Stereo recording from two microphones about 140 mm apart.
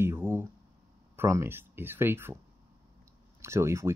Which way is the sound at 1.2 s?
15° right (ahead or behind).